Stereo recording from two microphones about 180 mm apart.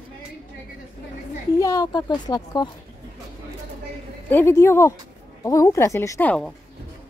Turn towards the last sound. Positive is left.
turn(degrees=15)  # may be behind; listen again after turning